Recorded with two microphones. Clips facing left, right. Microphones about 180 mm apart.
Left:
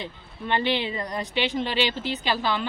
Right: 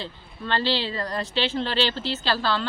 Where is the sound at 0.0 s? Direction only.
15° left (ahead or behind).